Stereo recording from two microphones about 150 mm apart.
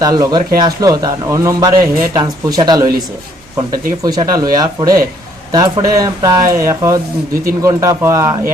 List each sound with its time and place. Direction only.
0.0 s a man's voice: 25° right (ahead or behind)
4.0 s a man's voice: 25° right (ahead or behind)